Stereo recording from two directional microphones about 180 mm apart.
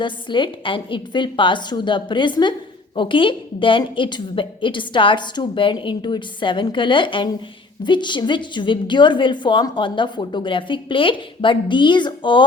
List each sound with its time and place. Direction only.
0.0 s a woman's voice: 25° left (ahead or behind)